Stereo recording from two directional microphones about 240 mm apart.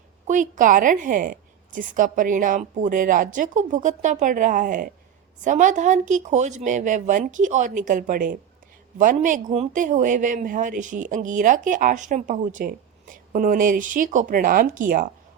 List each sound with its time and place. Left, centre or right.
0.3 s speech: right